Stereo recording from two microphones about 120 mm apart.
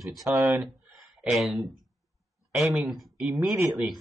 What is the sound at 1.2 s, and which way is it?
Speech, centre (ahead or behind).